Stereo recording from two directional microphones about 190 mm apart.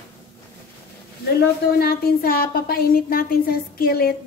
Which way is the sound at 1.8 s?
50° left (ahead or behind).